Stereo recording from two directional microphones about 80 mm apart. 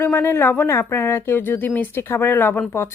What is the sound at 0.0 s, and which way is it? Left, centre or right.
Speech, left.